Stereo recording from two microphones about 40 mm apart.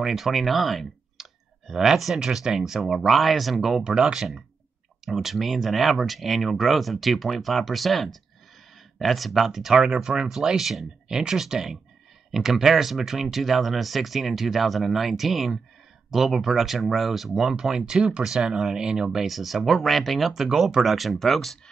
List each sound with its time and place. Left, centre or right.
0.0 s speech: centre
1.7 s speech: centre
18.2 s speech: centre
19.2 s speech: centre